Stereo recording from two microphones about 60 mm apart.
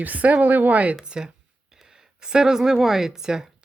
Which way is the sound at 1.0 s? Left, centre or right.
Centre.